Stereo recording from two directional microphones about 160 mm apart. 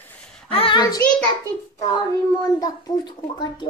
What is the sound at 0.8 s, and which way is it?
Speech, 20° left (ahead or behind).